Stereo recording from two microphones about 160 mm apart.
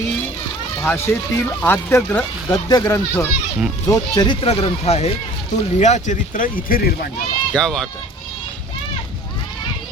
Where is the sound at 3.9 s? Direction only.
30° left (ahead or behind); by 6.9 s 65° left (ahead or behind).